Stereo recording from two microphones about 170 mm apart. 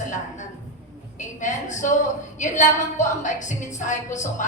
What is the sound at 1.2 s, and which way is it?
A woman's voice, 45° left (ahead or behind).